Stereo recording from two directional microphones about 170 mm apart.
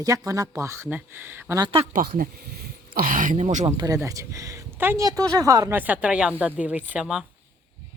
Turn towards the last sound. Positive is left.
turn(degrees=-5)  # may be behind; listen again after turning